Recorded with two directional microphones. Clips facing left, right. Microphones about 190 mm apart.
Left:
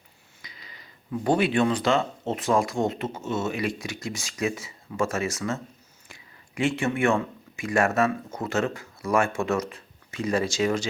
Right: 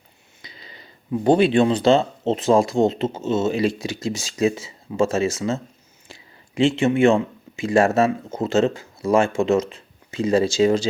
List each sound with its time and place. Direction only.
0.4 s speech: 30° right (ahead or behind)